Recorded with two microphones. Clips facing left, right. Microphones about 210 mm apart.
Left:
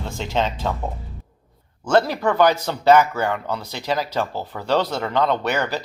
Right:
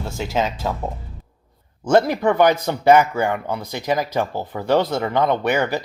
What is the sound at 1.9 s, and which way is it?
Speech, 15° right (ahead or behind).